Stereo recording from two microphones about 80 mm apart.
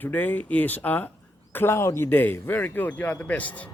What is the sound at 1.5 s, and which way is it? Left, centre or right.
A man's voice, left.